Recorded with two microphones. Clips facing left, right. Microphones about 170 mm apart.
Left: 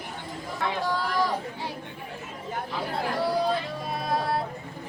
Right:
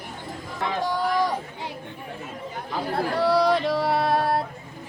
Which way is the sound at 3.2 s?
75° right (ahead or behind).